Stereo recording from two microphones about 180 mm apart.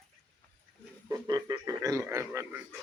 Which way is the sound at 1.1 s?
20° right (ahead or behind).